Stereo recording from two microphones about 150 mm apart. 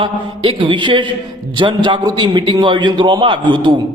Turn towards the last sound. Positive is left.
turn(degrees=-30)  # may be behind; listen again after turning